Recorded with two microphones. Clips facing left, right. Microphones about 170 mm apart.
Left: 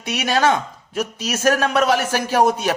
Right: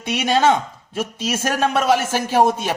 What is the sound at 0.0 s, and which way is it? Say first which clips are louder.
Speech: right 2 dB; 20° right (ahead or behind).